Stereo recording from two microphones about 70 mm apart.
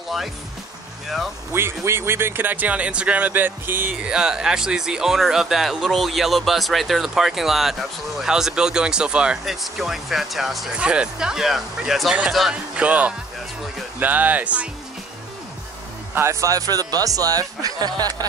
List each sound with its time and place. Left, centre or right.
1.0 s speech: centre
1.5 s speech: right
4.0 s speech: centre
9.4 s speech: centre
10.8 s speech: centre
12.7 s speech: centre
16.2 s speech: right